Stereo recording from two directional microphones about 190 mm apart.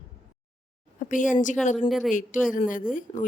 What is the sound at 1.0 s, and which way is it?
Speech, 45° left (ahead or behind).